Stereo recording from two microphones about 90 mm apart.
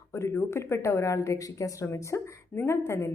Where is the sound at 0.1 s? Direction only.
30° left (ahead or behind).